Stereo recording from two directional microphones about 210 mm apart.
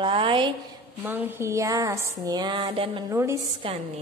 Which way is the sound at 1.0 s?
10° right (ahead or behind).